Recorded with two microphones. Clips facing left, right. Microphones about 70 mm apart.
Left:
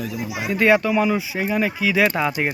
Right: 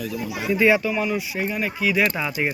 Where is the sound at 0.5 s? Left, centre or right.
Left.